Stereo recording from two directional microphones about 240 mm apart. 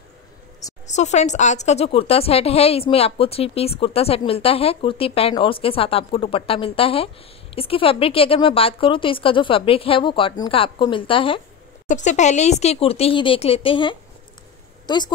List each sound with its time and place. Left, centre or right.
0.8 s a woman's voice: left